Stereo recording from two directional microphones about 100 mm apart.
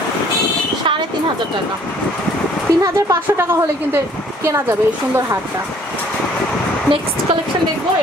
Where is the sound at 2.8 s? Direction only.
30° right (ahead or behind).